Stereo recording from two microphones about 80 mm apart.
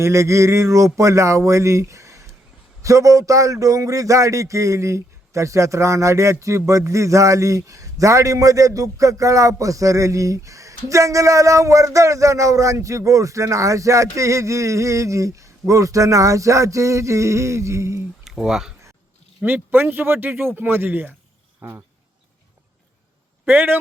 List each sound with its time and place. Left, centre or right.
0.0 s a man's voice: right
18.3 s speech: centre
19.4 s speech: right
23.5 s speech: right